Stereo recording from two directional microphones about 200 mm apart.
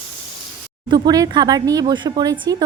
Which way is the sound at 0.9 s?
20° right (ahead or behind).